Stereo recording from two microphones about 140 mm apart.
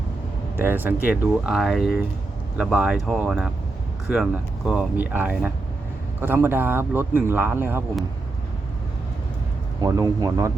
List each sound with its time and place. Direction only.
0.5 s speech: 15° right (ahead or behind)
9.8 s speech: 25° right (ahead or behind)